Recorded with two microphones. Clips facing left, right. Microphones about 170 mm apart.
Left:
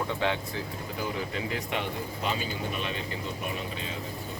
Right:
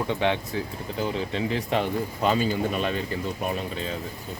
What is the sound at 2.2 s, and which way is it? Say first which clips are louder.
Speech: right 9 dB; 45° right (ahead or behind).